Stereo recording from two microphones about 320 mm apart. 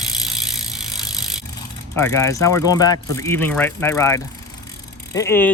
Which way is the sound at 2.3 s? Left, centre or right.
Centre.